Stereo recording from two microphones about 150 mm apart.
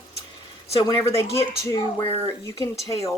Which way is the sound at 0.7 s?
25° left (ahead or behind).